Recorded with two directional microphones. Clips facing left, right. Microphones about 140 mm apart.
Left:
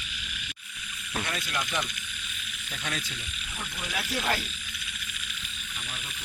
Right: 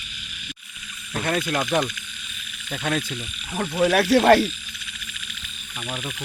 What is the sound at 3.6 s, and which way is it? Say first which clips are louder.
Speech: right 17 dB; 75° right (ahead or behind).